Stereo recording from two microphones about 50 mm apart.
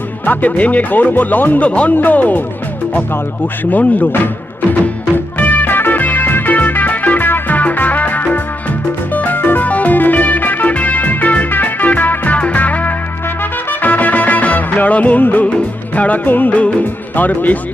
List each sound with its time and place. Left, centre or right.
0.3 s speech: left
1.6 s speech: left
4.7 s music: left
16.0 s speech: left
16.5 s speech: left